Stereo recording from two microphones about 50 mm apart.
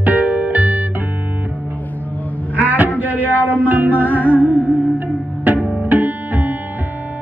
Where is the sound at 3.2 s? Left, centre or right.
Left.